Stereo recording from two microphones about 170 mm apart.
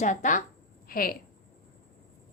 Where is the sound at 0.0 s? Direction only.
45° left (ahead or behind).